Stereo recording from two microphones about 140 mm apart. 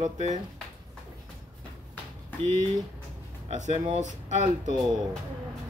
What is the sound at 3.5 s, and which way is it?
Speech, 60° right (ahead or behind).